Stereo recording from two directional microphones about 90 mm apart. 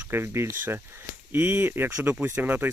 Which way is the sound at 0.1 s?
30° right (ahead or behind).